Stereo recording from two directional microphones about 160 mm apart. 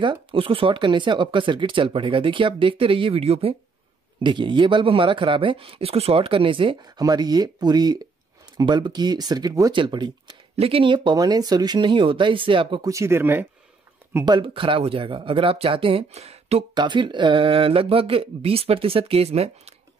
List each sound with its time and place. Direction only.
0.0 s speech: 30° right (ahead or behind)
10.5 s speech: 35° right (ahead or behind)
12.9 s speech: 15° right (ahead or behind)
14.2 s speech: 30° right (ahead or behind)
16.7 s speech: 30° right (ahead or behind)